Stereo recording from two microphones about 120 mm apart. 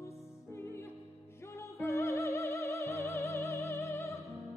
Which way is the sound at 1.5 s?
25° left (ahead or behind).